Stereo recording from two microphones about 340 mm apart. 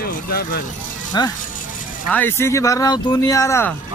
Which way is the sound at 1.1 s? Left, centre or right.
Centre.